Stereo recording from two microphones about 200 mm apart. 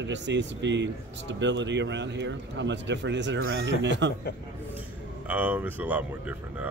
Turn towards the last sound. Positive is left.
turn(degrees=-10)  # may be behind; listen again after turning